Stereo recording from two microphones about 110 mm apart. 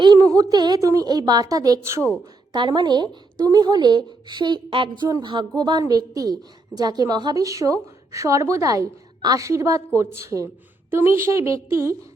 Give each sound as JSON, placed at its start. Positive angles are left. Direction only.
{"t": 0.5, "sound": "speech", "side_deg": -40}
{"t": 2.5, "sound": "speech", "side_deg": -40}
{"t": 5.0, "sound": "speech", "side_deg": -30}
{"t": 5.3, "sound": "a woman's voice", "side_deg": -45}